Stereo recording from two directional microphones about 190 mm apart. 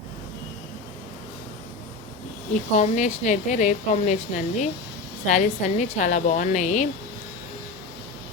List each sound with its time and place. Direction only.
2.7 s a woman's voice: 40° left (ahead or behind)